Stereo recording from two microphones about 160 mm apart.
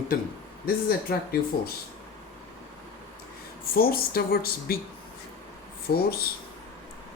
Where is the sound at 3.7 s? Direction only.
70° left (ahead or behind).